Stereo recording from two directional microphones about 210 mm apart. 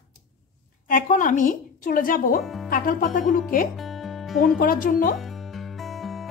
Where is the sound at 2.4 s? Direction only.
Centre (ahead or behind).